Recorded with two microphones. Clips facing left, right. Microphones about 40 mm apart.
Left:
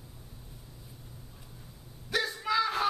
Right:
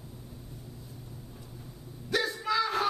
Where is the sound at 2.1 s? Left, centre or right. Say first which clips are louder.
Right 1 dB; centre.